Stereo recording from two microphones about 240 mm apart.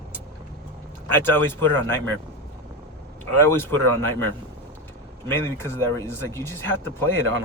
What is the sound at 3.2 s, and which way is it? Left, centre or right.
Speech, centre.